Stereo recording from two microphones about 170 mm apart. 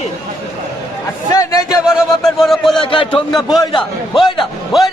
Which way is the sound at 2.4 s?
Centre (ahead or behind).